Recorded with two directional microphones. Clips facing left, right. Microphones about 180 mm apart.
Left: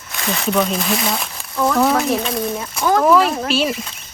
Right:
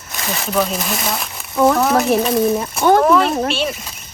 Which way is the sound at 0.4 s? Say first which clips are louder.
Left 1 dB; centre (ahead or behind).